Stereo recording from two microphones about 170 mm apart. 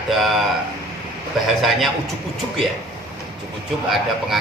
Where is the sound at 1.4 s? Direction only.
Centre (ahead or behind).